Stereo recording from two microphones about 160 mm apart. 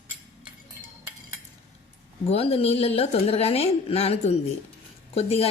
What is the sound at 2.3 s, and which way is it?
A woman's voice, 35° left (ahead or behind).